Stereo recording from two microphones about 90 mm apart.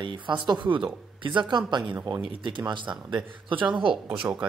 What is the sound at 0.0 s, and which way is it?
Speech, 60° right (ahead or behind).